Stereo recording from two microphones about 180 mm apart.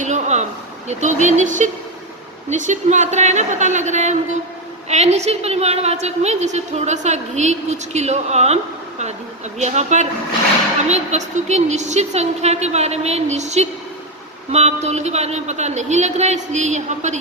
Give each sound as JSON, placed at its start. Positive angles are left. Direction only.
{"t": 0.0, "sound": "a sound", "side_deg": -40}
{"t": 0.9, "sound": "a woman's voice", "side_deg": -40}
{"t": 9.6, "sound": "a woman's voice", "side_deg": -40}